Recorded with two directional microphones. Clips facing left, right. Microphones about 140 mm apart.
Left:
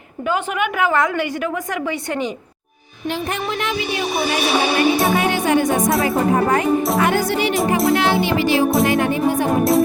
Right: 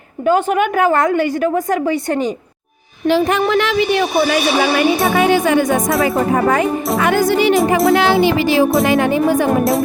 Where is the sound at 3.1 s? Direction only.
90° right.